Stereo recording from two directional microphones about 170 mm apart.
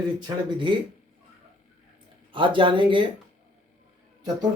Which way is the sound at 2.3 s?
30° right (ahead or behind).